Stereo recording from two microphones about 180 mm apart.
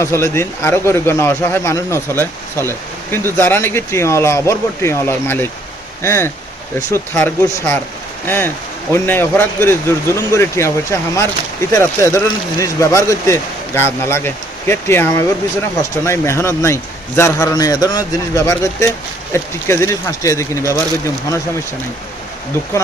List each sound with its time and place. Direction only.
0.0 s speech: 15° left (ahead or behind)